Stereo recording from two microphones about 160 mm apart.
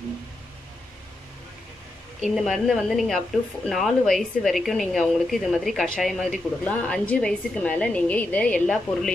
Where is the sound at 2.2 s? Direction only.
Centre (ahead or behind).